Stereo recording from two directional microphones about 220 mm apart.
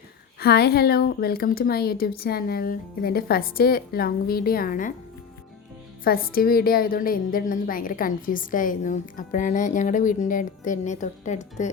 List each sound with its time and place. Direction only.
0.3 s speech: 45° left (ahead or behind)
6.1 s a woman's voice: 40° left (ahead or behind)